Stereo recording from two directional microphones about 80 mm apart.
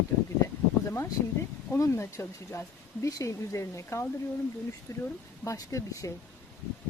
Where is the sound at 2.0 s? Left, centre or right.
Left.